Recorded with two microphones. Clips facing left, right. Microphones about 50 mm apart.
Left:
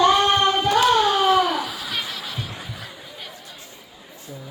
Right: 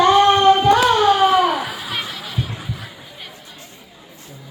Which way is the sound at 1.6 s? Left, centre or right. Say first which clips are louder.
Right 3 dB; right.